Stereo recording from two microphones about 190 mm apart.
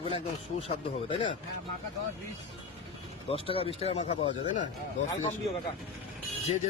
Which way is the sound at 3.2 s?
30° left (ahead or behind).